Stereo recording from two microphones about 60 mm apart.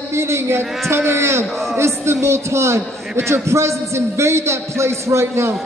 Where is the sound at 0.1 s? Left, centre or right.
Right.